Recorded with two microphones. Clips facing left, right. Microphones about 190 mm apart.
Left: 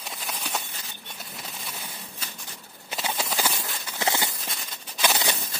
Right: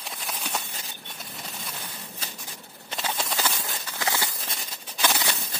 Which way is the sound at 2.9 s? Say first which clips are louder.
Left 1 dB; centre (ahead or behind).